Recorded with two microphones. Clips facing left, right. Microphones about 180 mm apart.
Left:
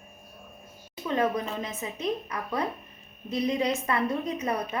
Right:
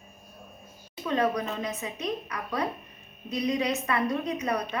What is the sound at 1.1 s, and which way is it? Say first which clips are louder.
Speech: even; 25° left (ahead or behind).